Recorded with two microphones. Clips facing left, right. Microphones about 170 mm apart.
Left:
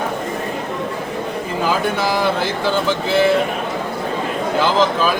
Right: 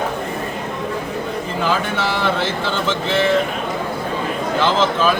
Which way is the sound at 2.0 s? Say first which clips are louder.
Left 2 dB; 10° left (ahead or behind).